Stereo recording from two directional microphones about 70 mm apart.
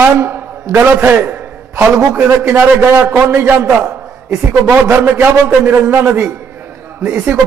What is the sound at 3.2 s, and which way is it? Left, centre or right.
Speech, right.